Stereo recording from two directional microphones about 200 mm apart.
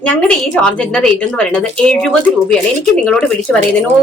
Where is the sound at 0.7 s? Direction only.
5° left (ahead or behind).